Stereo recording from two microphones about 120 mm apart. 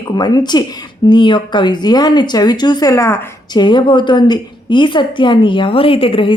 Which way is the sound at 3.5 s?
40° left (ahead or behind).